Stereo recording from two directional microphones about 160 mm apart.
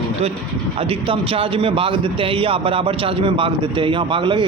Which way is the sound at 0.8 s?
35° right (ahead or behind).